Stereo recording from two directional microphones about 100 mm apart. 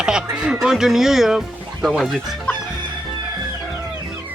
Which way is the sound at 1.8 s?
Centre (ahead or behind).